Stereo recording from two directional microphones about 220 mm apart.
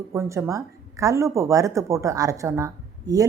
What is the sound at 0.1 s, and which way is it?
A woman's voice, 15° right (ahead or behind).